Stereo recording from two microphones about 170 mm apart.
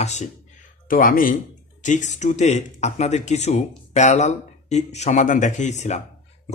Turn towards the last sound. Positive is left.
turn(degrees=45)  # may be behind; listen again after turning